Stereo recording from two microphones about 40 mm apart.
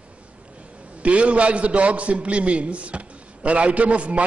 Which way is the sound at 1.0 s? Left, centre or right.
Right.